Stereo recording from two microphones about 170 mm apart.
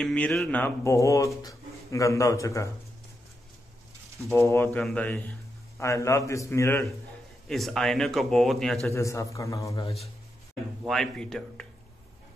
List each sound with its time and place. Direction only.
0.0 s speech: 5° left (ahead or behind)
4.4 s speech: 15° left (ahead or behind)
7.4 s speech: centre (ahead or behind)
8.9 s a man's voice: 15° left (ahead or behind)
10.8 s speech: centre (ahead or behind)